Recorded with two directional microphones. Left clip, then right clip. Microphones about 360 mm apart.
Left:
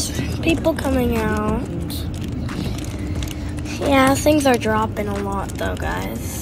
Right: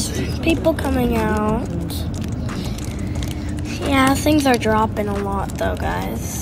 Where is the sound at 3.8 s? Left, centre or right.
Centre.